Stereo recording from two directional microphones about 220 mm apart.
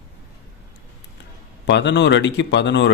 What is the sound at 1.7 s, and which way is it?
Speech, 55° left (ahead or behind).